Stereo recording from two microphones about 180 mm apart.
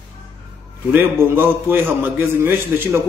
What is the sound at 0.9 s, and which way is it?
A man's voice, 10° right (ahead or behind).